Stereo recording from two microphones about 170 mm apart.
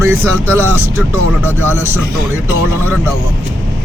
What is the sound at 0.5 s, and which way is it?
A man's voice, 15° right (ahead or behind).